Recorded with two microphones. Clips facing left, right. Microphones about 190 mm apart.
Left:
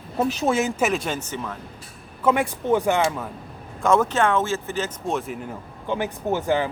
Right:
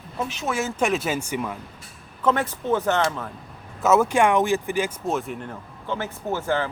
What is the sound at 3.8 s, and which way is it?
Speech, 5° right (ahead or behind).